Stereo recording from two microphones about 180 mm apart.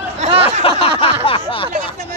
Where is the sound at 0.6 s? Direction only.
30° left (ahead or behind).